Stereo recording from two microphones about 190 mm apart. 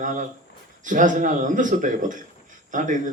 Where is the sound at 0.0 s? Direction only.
45° right (ahead or behind).